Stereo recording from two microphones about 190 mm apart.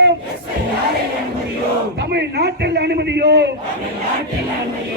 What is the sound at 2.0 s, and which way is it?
A man's voice, 60° right (ahead or behind).